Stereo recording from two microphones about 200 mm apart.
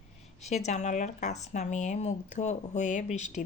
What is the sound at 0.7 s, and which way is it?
A woman's voice, 35° left (ahead or behind).